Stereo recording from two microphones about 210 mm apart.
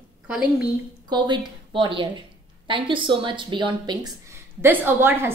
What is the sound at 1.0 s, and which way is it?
A woman's voice, 20° right (ahead or behind).